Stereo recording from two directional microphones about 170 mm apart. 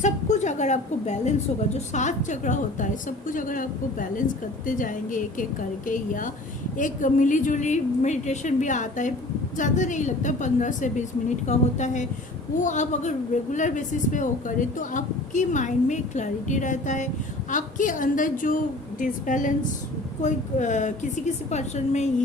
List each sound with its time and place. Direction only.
0.0 s a woman's voice: 45° left (ahead or behind)